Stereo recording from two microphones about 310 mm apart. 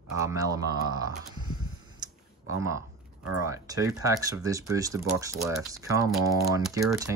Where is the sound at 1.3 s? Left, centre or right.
Centre.